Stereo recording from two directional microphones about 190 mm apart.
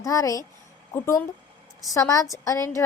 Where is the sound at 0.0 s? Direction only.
15° left (ahead or behind).